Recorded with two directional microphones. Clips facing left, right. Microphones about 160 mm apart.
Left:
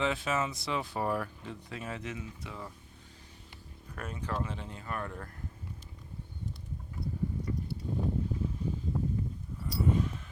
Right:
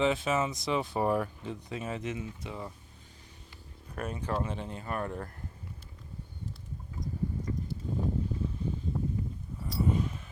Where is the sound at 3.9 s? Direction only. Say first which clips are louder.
Right 3 dB; 25° right (ahead or behind).